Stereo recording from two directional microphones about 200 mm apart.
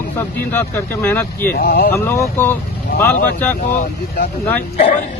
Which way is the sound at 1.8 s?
10° left (ahead or behind).